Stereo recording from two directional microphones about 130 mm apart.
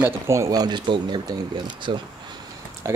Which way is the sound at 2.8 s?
20° right (ahead or behind).